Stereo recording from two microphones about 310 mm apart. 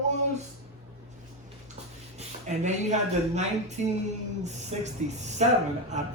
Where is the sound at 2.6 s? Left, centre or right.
Right.